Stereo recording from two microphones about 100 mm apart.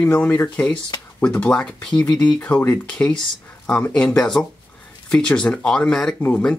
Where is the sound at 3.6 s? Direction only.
10° left (ahead or behind).